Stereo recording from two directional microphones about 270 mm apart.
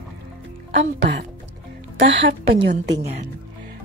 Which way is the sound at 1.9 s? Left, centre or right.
Right.